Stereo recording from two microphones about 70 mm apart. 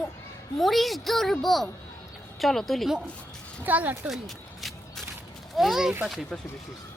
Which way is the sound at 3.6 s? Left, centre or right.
Right.